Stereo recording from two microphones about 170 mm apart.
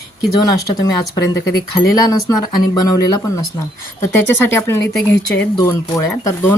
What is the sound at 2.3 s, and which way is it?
Speech, 25° left (ahead or behind).